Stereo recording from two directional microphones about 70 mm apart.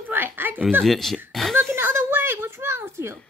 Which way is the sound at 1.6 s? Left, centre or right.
Right.